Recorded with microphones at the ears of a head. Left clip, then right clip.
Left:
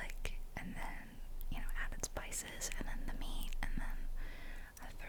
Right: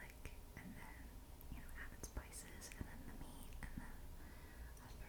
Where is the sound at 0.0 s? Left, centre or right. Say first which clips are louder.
Left 10 dB; left.